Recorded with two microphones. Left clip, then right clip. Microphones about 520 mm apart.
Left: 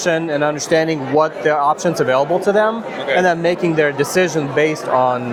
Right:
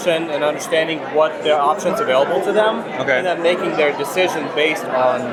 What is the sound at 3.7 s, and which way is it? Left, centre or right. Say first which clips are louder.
A man's voice: left 2 dB; left.